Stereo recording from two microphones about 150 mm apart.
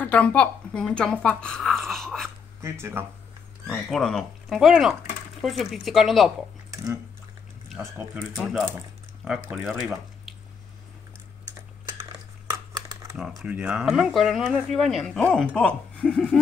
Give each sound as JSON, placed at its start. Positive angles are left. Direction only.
{"t": 0.0, "sound": "a woman's voice", "side_deg": 10}
{"t": 2.6, "sound": "speech", "side_deg": -15}
{"t": 3.6, "sound": "speech", "side_deg": 0}
{"t": 7.8, "sound": "speech", "side_deg": -15}
{"t": 12.4, "sound": "a sound", "side_deg": -20}
{"t": 13.4, "sound": "speech", "side_deg": -10}